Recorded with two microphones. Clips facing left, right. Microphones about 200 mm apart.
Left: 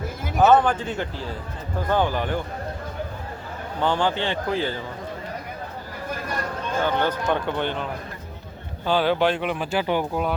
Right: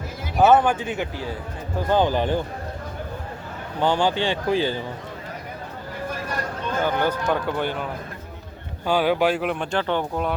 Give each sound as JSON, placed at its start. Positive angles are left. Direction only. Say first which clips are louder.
{"t": 0.3, "sound": "speech", "louder": "right 1 dB", "side_deg": -10}
{"t": 3.8, "sound": "speech", "louder": "right 2 dB", "side_deg": -15}
{"t": 6.8, "sound": "speech", "louder": "right 1 dB", "side_deg": -10}
{"t": 8.9, "sound": "speech", "louder": "right 1 dB", "side_deg": -10}